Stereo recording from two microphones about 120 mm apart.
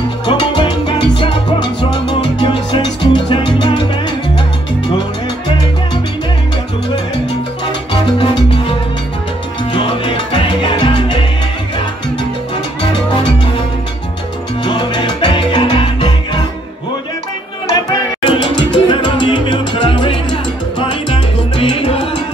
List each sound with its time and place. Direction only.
0.3 s salsa music: 40° left (ahead or behind)
7.9 s salsa music: 45° left (ahead or behind)
14.6 s salsa music: 40° left (ahead or behind)
17.8 s salsa music: 45° left (ahead or behind)
20.8 s music: 50° left (ahead or behind)